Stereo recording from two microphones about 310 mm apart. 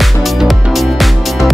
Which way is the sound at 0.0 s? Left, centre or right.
Centre.